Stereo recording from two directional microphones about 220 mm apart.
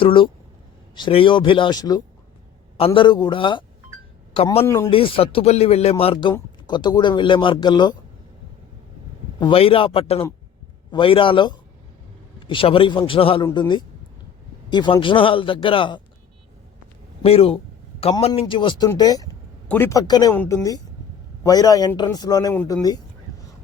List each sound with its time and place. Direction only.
0.0 s speech: 25° left (ahead or behind)
4.6 s speech: 10° left (ahead or behind)
4.9 s speech: 25° left (ahead or behind)
9.4 s speech: 25° left (ahead or behind)
17.2 s speech: 25° left (ahead or behind)